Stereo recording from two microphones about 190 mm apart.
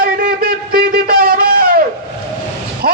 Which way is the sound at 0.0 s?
50° right (ahead or behind).